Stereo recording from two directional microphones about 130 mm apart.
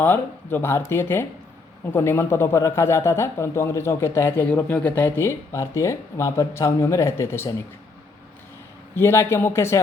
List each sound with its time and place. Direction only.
0.0 s a man's voice: 15° left (ahead or behind)
9.0 s a man's voice: 20° left (ahead or behind)